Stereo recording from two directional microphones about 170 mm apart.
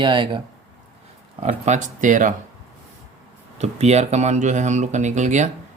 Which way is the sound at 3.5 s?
40° right (ahead or behind).